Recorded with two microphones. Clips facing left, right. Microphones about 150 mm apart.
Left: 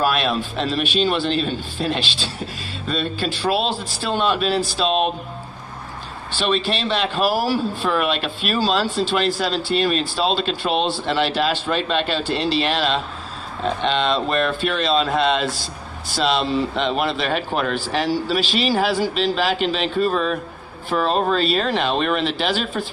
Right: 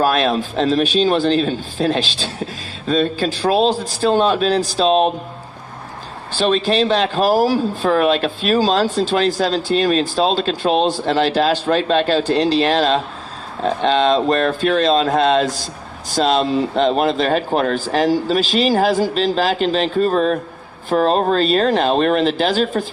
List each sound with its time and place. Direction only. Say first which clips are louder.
0.0 s speech: right 4 dB; 40° right (ahead or behind)
6.3 s speech: right 5 dB; 40° right (ahead or behind)